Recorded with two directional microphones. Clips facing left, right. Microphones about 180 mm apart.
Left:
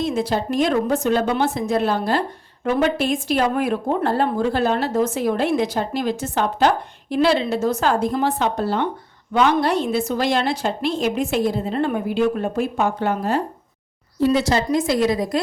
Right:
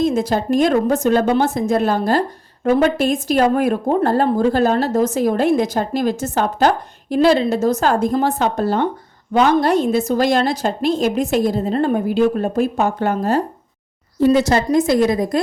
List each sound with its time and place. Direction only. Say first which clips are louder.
0.0 s a woman's voice: right 4 dB; 45° right (ahead or behind)